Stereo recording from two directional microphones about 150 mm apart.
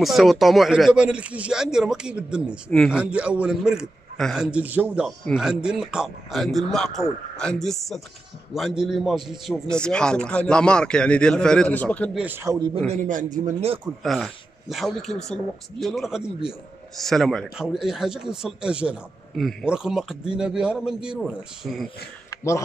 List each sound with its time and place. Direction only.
0.0 s a man's voice: centre (ahead or behind)
12.1 s a man's voice: 10° right (ahead or behind)
12.5 s a man's voice: 30° right (ahead or behind)
12.9 s a man's voice: 60° right (ahead or behind)
14.0 s speech: centre (ahead or behind)
22.3 s a sound: 20° left (ahead or behind)